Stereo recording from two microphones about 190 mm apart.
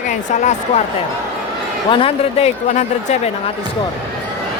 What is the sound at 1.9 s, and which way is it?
A woman's voice, 30° left (ahead or behind).